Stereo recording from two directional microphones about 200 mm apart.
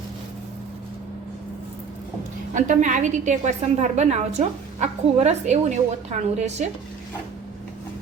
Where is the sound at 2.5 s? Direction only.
40° right (ahead or behind).